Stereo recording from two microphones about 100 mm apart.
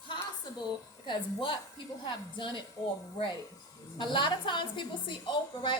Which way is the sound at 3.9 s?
50° left (ahead or behind).